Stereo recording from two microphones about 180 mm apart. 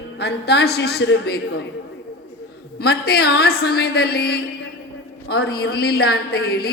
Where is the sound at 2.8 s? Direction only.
60° left (ahead or behind).